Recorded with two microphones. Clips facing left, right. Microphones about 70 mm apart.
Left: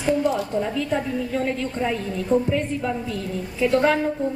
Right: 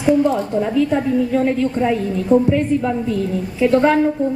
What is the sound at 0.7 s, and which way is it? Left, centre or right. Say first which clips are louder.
A woman's voice: right 8 dB; centre.